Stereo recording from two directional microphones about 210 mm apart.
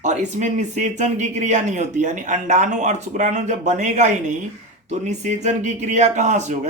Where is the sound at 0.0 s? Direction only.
35° right (ahead or behind).